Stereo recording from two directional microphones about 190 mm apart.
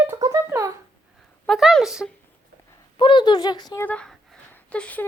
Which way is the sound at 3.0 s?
25° left (ahead or behind).